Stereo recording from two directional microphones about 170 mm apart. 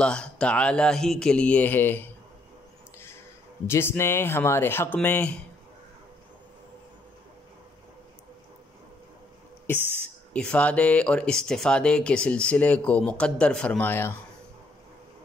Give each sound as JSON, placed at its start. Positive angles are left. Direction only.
{"t": 0.0, "sound": "speech", "side_deg": 5}
{"t": 3.6, "sound": "speech", "side_deg": 15}
{"t": 10.3, "sound": "speech", "side_deg": 5}